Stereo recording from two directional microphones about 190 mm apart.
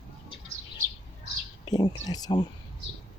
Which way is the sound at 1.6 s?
20° left (ahead or behind).